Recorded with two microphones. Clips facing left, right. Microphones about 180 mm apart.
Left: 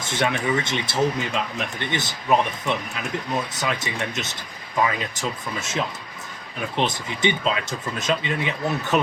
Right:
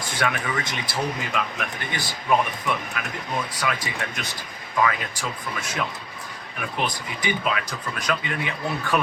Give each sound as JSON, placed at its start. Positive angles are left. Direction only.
{"t": 0.0, "sound": "speech", "side_deg": 25}